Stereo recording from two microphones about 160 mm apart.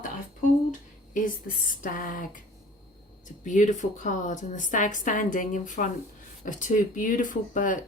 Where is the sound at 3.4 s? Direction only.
50° left (ahead or behind).